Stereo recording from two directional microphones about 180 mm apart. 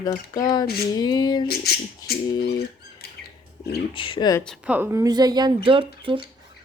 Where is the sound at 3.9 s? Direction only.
30° left (ahead or behind).